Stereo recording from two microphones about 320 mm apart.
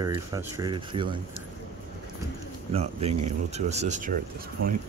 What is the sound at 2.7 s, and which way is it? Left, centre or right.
Speech, centre.